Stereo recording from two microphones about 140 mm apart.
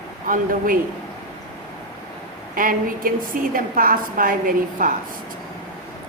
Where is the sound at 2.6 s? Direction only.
85° right.